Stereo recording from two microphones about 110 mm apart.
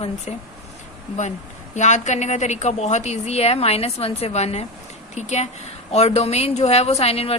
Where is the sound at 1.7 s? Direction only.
90° left.